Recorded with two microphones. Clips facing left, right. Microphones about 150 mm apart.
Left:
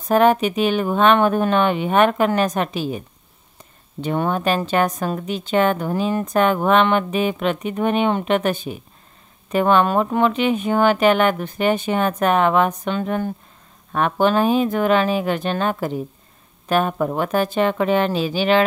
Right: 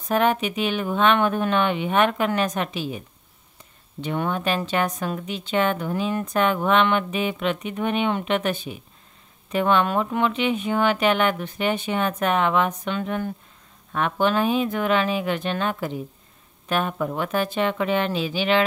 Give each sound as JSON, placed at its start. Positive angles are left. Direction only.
{"t": 0.1, "sound": "speech", "side_deg": 40}
{"t": 4.0, "sound": "a woman's voice", "side_deg": 40}